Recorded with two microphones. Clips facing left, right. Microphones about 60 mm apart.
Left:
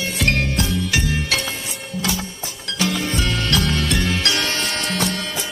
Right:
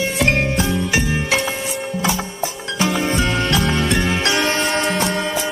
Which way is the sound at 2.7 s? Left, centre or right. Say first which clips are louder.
Right 3 dB; right.